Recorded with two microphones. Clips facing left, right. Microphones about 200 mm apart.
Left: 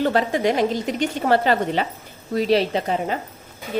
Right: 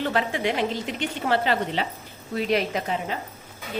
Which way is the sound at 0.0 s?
40° left (ahead or behind).